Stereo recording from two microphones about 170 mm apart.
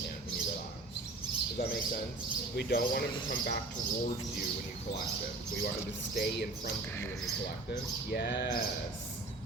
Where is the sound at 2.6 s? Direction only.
65° left (ahead or behind).